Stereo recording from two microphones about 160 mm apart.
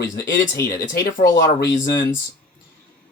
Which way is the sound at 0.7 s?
60° left (ahead or behind).